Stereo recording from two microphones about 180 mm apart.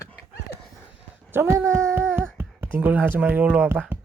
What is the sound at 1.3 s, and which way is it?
Speech, 15° right (ahead or behind).